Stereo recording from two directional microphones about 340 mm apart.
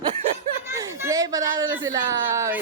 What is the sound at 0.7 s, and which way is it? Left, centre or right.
A child's voice, centre.